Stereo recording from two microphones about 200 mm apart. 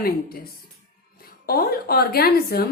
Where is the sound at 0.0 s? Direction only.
50° left (ahead or behind).